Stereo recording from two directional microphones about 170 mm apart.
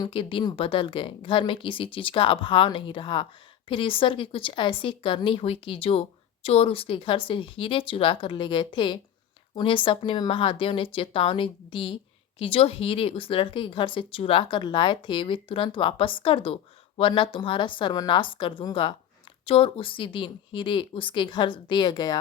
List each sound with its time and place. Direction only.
0.0 s a woman's voice: 30° left (ahead or behind)